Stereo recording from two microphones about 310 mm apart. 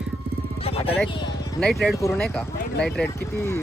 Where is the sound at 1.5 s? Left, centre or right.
Centre.